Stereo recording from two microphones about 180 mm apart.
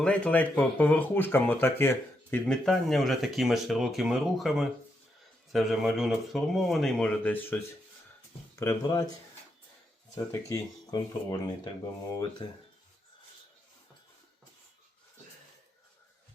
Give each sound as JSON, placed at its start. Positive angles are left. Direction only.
{"t": 0.0, "sound": "speech", "side_deg": 5}
{"t": 8.5, "sound": "speech", "side_deg": 20}
{"t": 10.2, "sound": "speech", "side_deg": 20}